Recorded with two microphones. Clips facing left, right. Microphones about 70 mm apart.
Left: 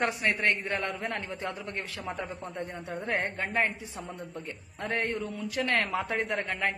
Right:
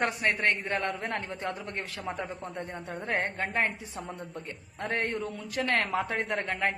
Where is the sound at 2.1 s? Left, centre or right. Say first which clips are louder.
Even; right.